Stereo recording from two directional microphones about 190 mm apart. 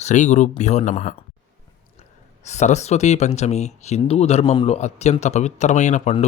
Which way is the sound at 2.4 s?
35° left (ahead or behind).